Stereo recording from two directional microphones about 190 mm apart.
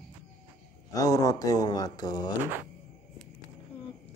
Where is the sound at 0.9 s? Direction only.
20° left (ahead or behind).